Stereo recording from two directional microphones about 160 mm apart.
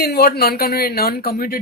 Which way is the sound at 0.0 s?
80° left.